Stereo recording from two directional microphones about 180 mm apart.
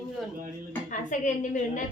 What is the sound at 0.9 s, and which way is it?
Speech, 45° left (ahead or behind).